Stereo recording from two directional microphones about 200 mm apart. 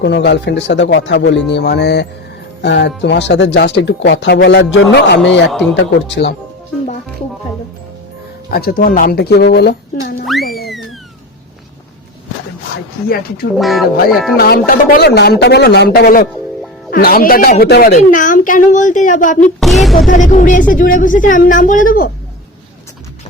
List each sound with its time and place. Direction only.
0.0 s speech: 60° left (ahead or behind)
8.4 s speech: 50° left (ahead or behind)
10.4 s music: 50° left (ahead or behind)
13.1 s speech: 50° left (ahead or behind)
13.6 s speech: centre (ahead or behind)
14.3 s a woman's voice: 50° left (ahead or behind)
19.5 s speech: centre (ahead or behind)
20.1 s a woman's voice: 40° left (ahead or behind)